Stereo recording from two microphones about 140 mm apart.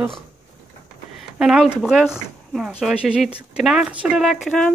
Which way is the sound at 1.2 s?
5° right (ahead or behind).